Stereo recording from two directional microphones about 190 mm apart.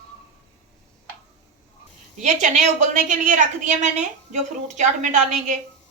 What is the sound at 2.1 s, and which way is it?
A woman's voice, 40° right (ahead or behind).